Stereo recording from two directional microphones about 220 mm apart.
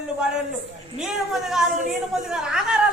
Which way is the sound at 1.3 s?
Centre (ahead or behind).